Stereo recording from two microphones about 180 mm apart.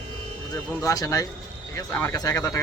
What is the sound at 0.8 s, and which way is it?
Speech, 20° left (ahead or behind).